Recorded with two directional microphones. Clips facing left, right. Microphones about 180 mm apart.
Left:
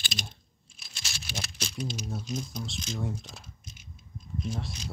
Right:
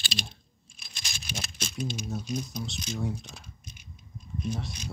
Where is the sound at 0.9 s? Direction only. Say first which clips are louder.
Even; 15° right (ahead or behind).